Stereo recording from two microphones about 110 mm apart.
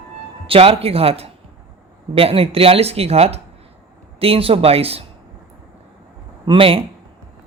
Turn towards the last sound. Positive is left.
turn(degrees=-60)  # may be behind; listen again after turning